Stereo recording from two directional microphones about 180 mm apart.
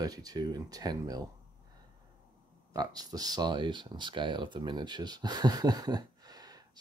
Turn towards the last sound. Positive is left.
turn(degrees=-20)  # may be behind; listen again after turning